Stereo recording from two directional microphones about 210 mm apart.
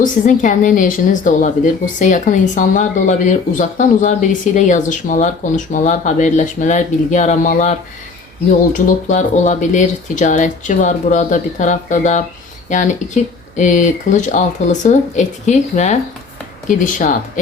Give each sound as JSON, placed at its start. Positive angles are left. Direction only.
{"t": 0.0, "sound": "speech", "side_deg": 35}